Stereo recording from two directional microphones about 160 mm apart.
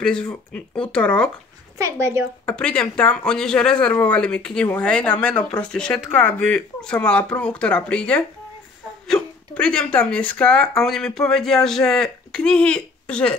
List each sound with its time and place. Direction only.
0.0 s speech: 5° left (ahead or behind)
1.8 s a woman's voice: 20° right (ahead or behind)
2.4 s speech: 5° left (ahead or behind)